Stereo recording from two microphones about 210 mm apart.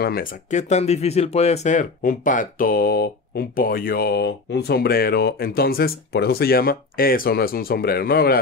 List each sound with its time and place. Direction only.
0.0 s speech: 45° left (ahead or behind)